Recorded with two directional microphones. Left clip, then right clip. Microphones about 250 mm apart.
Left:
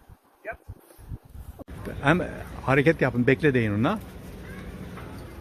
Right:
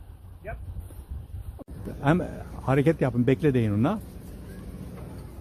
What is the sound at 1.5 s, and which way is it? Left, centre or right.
A man's voice, centre.